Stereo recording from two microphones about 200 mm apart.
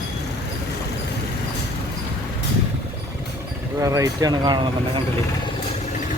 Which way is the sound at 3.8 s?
15° right (ahead or behind).